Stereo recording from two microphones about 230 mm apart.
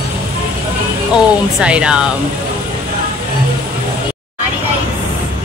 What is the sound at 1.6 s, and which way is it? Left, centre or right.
Speech, centre.